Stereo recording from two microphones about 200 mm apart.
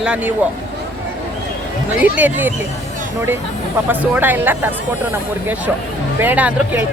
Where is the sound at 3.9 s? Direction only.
10° right (ahead or behind).